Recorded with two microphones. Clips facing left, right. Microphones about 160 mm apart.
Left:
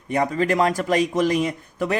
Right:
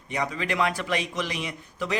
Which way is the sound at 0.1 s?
50° left (ahead or behind).